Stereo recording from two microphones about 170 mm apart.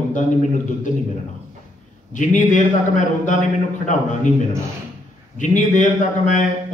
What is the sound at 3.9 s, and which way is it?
Speech, 50° left (ahead or behind).